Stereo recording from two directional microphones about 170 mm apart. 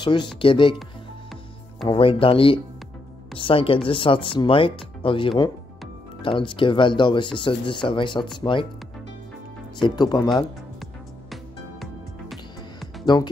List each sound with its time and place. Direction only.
0.0 s speech: 25° left (ahead or behind)
1.9 s speech: 30° left (ahead or behind)
9.8 s speech: 25° left (ahead or behind)
10.3 s music: centre (ahead or behind)
12.8 s music: 25° left (ahead or behind)